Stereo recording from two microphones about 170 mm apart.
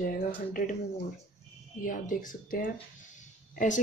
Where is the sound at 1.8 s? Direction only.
50° left (ahead or behind).